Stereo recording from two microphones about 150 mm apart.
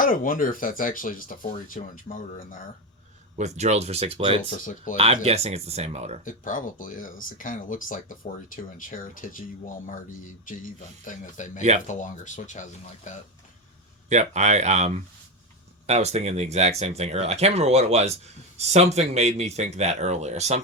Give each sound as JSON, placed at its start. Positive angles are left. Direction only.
{"t": 0.0, "sound": "speech", "side_deg": 65}
{"t": 3.3, "sound": "speech", "side_deg": -50}
{"t": 4.6, "sound": "speech", "side_deg": 60}
{"t": 4.9, "sound": "speech", "side_deg": -45}
{"t": 6.2, "sound": "speech", "side_deg": 60}
{"t": 14.1, "sound": "speech", "side_deg": -50}